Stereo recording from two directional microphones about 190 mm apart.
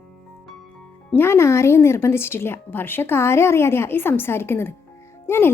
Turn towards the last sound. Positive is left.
turn(degrees=10)  # may be behind; listen again after turning